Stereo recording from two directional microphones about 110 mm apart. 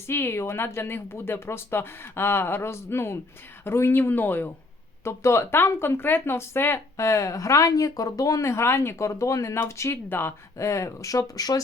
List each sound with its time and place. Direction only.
0.1 s speech: 20° left (ahead or behind)